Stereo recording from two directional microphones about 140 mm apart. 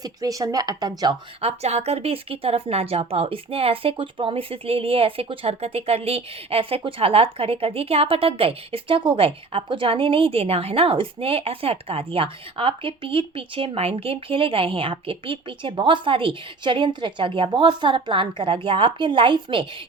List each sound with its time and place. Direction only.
0.0 s speech: 25° right (ahead or behind)
1.4 s speech: 50° right (ahead or behind)